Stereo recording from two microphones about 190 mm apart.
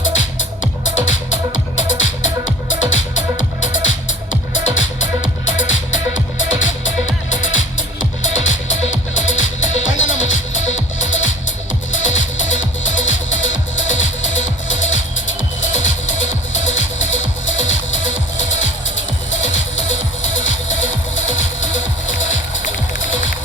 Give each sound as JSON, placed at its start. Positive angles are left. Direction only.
{"t": 0.0, "sound": "music", "side_deg": 90}